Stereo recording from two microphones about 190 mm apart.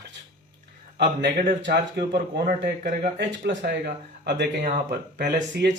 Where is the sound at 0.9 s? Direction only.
65° right (ahead or behind).